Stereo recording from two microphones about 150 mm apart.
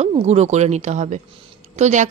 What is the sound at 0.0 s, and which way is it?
A woman's voice, 45° right (ahead or behind).